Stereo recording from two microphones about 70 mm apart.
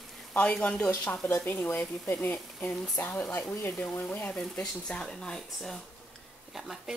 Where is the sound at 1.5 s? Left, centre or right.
Left.